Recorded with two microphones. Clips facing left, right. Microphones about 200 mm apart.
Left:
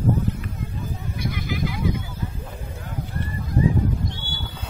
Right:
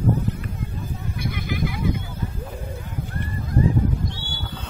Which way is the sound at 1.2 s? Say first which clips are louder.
Even; 60° right (ahead or behind).